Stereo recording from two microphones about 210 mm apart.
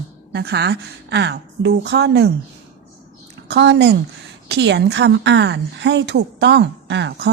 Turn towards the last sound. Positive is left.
turn(degrees=-55)  # may be behind; listen again after turning